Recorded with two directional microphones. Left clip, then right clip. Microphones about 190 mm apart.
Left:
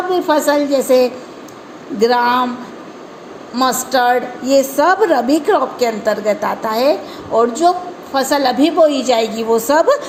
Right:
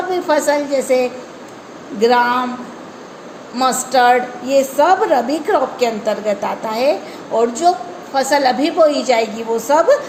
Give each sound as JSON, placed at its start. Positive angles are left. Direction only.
{"t": 0.1, "sound": "a woman's voice", "side_deg": 25}
{"t": 3.5, "sound": "a woman's voice", "side_deg": 30}